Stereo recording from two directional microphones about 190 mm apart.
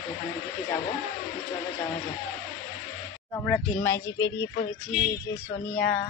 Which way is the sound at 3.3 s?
5° left (ahead or behind).